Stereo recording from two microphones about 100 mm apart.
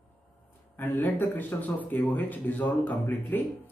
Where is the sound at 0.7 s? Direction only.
20° left (ahead or behind).